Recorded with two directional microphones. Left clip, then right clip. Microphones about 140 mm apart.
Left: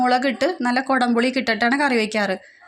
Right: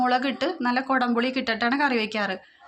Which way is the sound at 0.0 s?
45° left (ahead or behind).